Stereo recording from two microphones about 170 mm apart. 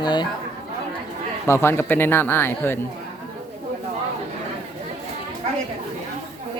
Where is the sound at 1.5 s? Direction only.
15° left (ahead or behind).